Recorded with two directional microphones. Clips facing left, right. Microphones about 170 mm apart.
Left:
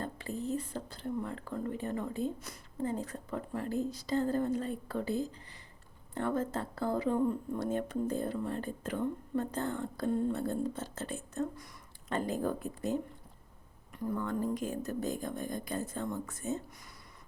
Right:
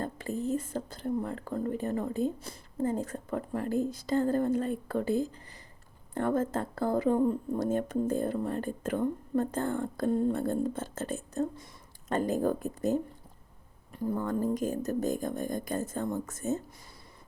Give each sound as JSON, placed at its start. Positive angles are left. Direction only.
{"t": 0.0, "sound": "speech", "side_deg": -45}
{"t": 13.9, "sound": "speech", "side_deg": -35}